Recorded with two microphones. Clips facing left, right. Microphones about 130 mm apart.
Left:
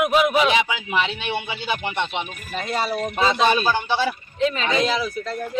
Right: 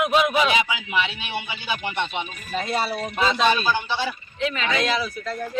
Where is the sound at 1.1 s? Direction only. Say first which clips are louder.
Left 4 dB; 25° left (ahead or behind).